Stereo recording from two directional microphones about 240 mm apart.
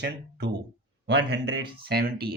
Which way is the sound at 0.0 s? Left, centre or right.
Right.